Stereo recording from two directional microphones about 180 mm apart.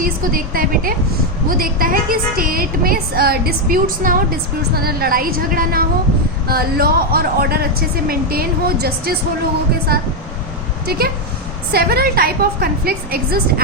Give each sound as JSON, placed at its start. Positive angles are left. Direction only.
{"t": 0.0, "sound": "a woman's voice", "side_deg": -50}